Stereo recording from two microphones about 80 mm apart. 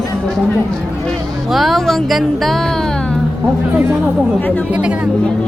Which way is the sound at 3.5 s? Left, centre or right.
Centre.